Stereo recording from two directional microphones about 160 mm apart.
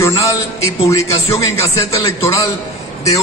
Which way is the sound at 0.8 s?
20° left (ahead or behind).